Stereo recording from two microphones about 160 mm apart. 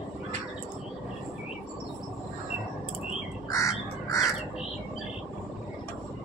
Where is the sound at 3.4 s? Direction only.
20° left (ahead or behind).